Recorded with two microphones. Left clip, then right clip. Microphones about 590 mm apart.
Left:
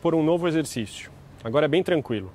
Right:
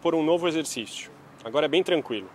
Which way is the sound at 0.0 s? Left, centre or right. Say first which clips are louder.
Left 1 dB; left.